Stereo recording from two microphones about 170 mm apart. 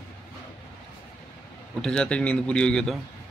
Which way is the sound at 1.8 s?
5° left (ahead or behind).